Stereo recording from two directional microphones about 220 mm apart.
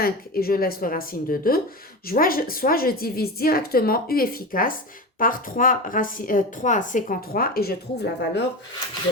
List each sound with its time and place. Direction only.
0.0 s a woman's voice: 45° left (ahead or behind)